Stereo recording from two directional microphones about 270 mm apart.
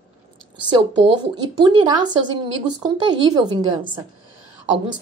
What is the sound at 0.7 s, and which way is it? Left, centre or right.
Speech, centre.